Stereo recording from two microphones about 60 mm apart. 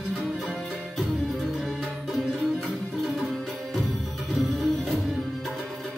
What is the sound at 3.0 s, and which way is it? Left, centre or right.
Music, centre.